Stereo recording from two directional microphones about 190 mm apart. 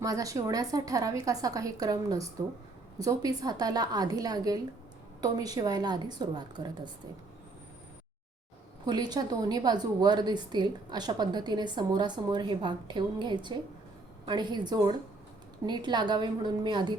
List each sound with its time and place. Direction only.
0.0 s a woman's voice: 20° right (ahead or behind)
8.9 s a woman's voice: 20° right (ahead or behind)